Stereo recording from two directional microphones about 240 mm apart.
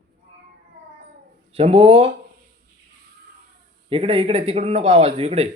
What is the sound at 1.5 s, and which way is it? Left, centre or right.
Speech, right.